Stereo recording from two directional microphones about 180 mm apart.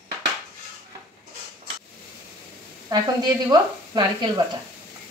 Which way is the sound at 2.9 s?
20° right (ahead or behind).